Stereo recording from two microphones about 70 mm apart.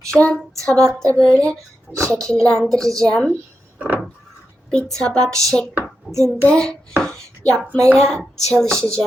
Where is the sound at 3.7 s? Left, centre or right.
Right.